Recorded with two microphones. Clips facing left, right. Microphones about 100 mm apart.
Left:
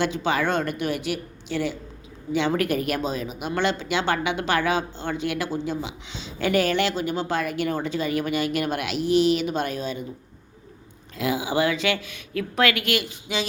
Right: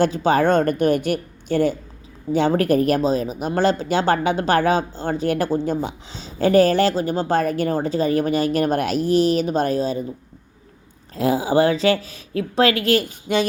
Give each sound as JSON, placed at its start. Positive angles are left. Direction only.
{"t": 0.0, "sound": "a woman's voice", "side_deg": -40}
{"t": 11.1, "sound": "speech", "side_deg": -40}